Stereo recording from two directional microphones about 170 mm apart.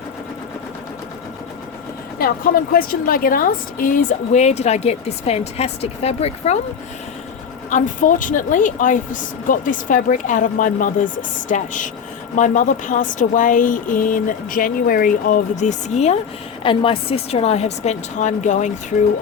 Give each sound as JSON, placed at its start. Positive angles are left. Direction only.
{"t": 2.1, "sound": "a woman's voice", "side_deg": 60}
{"t": 7.7, "sound": "speech", "side_deg": 50}
{"t": 16.6, "sound": "a woman's voice", "side_deg": 30}